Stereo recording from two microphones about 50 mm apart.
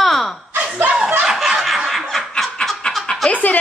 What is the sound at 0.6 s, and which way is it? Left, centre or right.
Snicker, right.